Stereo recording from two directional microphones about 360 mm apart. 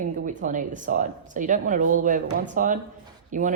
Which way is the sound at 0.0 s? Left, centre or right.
Right.